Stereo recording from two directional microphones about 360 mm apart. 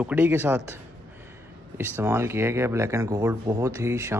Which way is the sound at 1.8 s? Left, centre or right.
Centre.